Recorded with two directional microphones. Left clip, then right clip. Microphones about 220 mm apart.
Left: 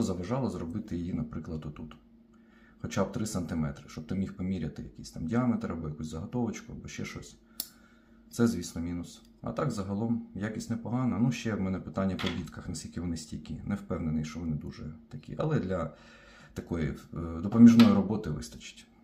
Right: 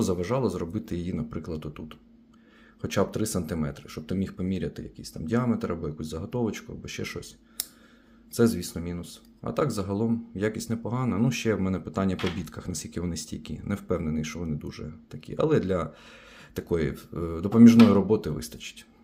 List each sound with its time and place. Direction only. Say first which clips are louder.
0.2 s speech: right 7 dB; 45° right (ahead or behind)
8.3 s speech: right 6 dB; 45° right (ahead or behind)